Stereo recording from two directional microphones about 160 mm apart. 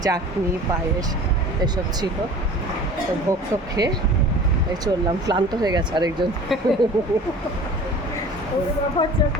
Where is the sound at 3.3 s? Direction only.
20° right (ahead or behind).